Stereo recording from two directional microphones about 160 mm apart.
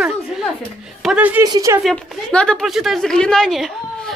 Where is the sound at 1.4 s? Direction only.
25° right (ahead or behind).